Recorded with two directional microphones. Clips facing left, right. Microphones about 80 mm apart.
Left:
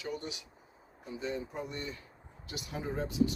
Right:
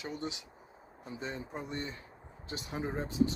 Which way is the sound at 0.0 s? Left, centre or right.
Right.